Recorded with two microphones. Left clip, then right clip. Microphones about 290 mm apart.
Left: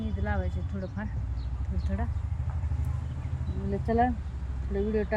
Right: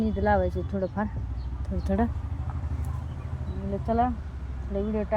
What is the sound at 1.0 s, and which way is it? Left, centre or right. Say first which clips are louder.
Speech: right 9 dB; centre.